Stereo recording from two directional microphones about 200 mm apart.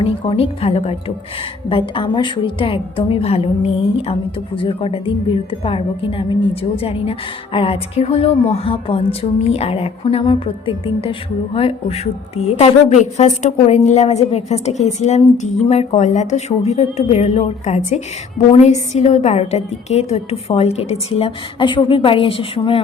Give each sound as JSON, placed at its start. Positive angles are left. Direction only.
{"t": 0.0, "sound": "a woman's voice", "side_deg": 30}